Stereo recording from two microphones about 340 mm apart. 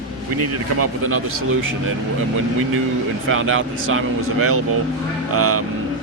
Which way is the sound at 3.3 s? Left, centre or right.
Right.